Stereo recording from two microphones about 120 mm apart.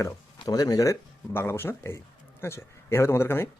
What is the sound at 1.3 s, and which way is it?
A man's voice, 20° left (ahead or behind).